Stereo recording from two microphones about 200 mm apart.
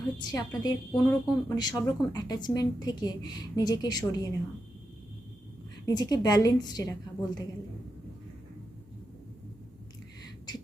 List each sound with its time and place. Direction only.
0.2 s a woman's voice: 20° left (ahead or behind)
5.8 s a woman's voice: 20° left (ahead or behind)